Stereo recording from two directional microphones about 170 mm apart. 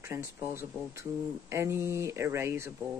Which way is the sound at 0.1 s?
15° right (ahead or behind).